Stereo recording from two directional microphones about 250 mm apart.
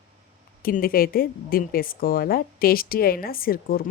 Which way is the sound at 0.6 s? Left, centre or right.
Left.